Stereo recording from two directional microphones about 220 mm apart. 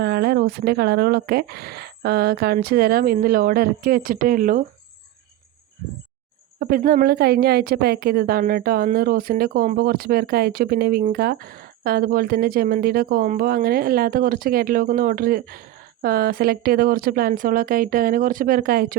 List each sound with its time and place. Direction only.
0.0 s speech: 45° right (ahead or behind)
6.6 s a woman's voice: 40° right (ahead or behind)